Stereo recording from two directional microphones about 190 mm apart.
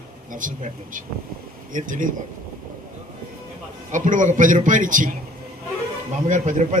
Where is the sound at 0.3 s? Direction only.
45° right (ahead or behind).